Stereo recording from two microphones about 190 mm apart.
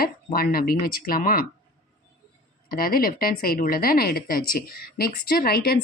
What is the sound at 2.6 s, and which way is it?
A woman's voice, 50° left (ahead or behind).